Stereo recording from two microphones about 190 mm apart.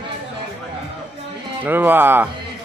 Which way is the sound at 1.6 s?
10° right (ahead or behind).